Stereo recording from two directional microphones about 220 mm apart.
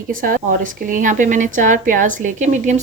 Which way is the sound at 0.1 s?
40° right (ahead or behind).